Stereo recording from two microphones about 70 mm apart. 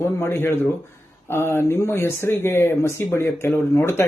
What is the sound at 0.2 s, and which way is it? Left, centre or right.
A man's voice, left.